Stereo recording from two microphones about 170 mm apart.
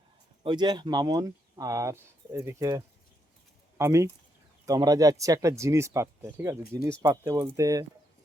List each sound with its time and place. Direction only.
0.4 s speech: 25° right (ahead or behind)